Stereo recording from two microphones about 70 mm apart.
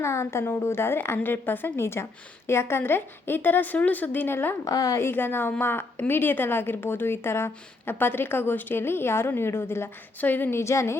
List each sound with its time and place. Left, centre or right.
0.0 s a woman's voice: left
4.6 s a woman's voice: left
4.9 s a woman's voice: left
10.2 s a woman's voice: left
10.6 s speech: left